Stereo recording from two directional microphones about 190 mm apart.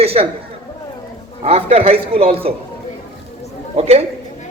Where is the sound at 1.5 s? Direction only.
30° right (ahead or behind).